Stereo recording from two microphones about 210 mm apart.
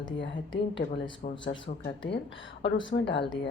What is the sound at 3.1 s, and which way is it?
Speech, 25° left (ahead or behind).